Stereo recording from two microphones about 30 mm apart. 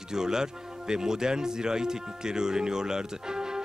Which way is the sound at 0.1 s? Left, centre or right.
Right.